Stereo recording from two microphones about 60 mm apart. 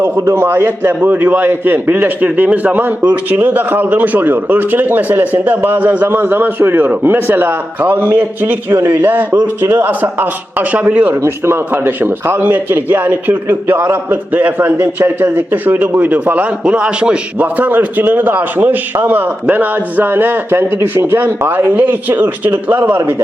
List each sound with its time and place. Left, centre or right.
0.3 s a man's voice: right
11.4 s a man's voice: right; by 17.2 s centre
17.4 s a man's voice: right